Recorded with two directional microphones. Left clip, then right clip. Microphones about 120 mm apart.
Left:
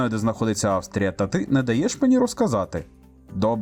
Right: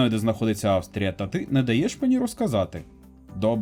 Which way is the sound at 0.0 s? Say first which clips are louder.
Even; 50° left (ahead or behind).